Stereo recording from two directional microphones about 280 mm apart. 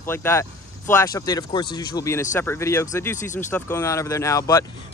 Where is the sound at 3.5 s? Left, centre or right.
Centre.